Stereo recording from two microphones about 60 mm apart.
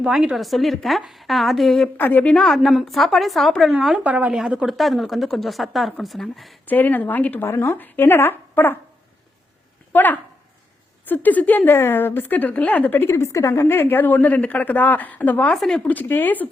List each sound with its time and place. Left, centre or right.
0.0 s a woman's voice: centre
2.0 s speech: left
2.3 s a woman's voice: centre
4.0 s speech: right
4.8 s a woman's voice: centre
6.7 s speech: left
7.4 s a woman's voice: left
9.9 s speech: left
13.1 s a woman's voice: left
13.5 s speech: left
15.5 s a woman's voice: centre
15.8 s speech: left